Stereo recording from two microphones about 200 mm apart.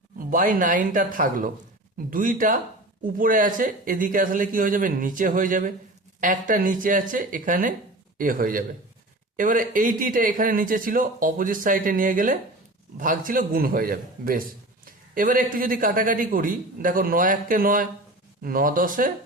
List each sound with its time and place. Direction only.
0.3 s speech: 40° right (ahead or behind)